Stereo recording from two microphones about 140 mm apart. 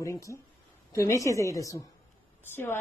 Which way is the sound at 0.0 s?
20° left (ahead or behind).